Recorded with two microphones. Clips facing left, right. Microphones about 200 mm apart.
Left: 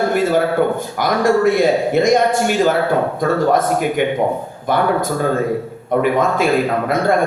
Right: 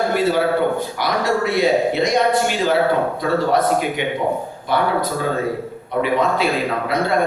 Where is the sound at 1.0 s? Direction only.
50° left (ahead or behind).